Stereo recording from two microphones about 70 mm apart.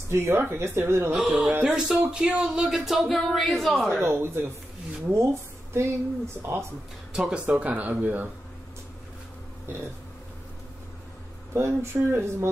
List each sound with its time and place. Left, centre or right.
0.1 s speech: right
1.1 s speech: centre
4.0 s speech: right
7.1 s speech: centre
7.4 s speech: right
11.5 s speech: right